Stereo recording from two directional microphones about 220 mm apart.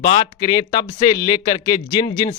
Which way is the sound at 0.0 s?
20° left (ahead or behind).